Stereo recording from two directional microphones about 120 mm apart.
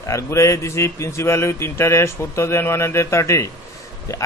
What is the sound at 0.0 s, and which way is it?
Speech, 25° left (ahead or behind).